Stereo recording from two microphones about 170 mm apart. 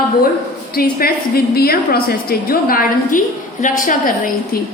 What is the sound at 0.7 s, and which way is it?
A woman's voice, 60° left (ahead or behind).